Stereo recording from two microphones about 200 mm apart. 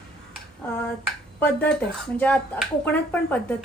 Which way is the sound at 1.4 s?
5° left (ahead or behind).